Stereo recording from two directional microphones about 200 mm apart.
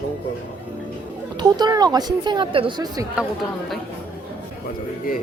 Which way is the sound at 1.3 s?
20° right (ahead or behind).